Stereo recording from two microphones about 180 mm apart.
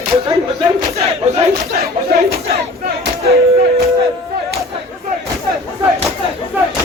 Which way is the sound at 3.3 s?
60° right (ahead or behind).